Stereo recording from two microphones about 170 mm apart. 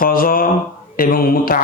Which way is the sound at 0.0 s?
60° left (ahead or behind).